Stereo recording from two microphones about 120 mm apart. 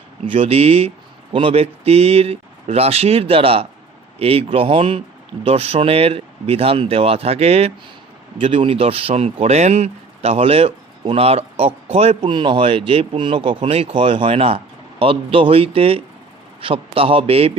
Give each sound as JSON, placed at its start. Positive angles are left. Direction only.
{"t": 0.3, "sound": "speech", "side_deg": -55}
{"t": 8.4, "sound": "speech", "side_deg": -50}
{"t": 12.3, "sound": "speech", "side_deg": -40}